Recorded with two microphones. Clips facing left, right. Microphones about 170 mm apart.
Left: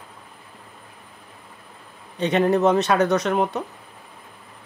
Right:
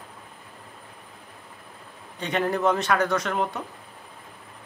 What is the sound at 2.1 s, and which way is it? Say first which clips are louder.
A man's voice: left 7 dB; 20° left (ahead or behind).